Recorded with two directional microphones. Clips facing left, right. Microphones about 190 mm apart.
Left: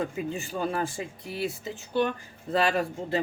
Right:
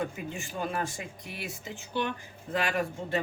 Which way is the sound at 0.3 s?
30° left (ahead or behind).